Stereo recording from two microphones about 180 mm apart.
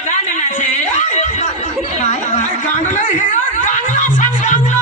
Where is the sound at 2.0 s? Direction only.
40° left (ahead or behind).